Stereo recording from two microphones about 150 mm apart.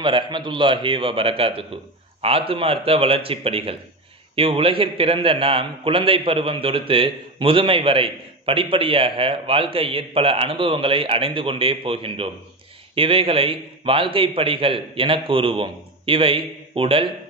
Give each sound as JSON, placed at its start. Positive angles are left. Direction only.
{"t": 0.0, "sound": "a man's voice", "side_deg": -30}